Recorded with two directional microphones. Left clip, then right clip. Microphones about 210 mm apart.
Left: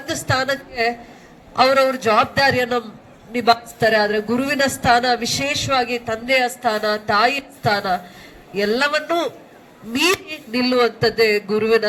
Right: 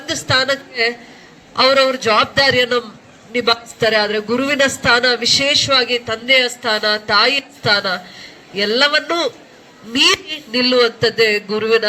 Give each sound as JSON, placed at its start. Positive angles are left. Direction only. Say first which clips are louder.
{"t": 0.0, "sound": "a woman's voice", "louder": "right 4 dB", "side_deg": 55}
{"t": 10.5, "sound": "a man's voice", "louder": "right 4 dB", "side_deg": 55}